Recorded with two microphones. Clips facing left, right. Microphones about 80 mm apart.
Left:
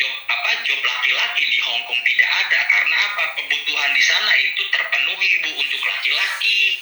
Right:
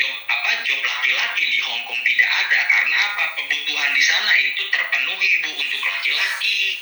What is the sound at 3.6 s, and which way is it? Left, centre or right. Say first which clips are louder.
Speech: left 1 dB; left.